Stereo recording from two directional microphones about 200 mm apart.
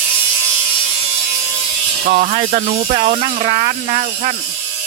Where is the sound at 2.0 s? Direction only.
40° right (ahead or behind).